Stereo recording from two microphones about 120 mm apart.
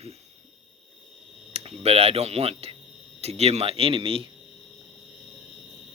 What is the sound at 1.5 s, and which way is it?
Speech, 60° right (ahead or behind).